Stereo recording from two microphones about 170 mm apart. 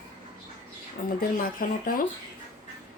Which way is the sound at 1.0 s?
50° left (ahead or behind).